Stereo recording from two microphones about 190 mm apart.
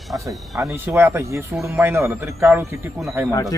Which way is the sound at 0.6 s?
15° right (ahead or behind).